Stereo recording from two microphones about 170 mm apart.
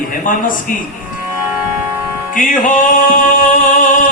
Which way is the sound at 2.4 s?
55° left (ahead or behind).